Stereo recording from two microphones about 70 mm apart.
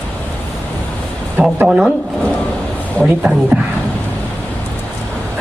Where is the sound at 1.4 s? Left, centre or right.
Centre.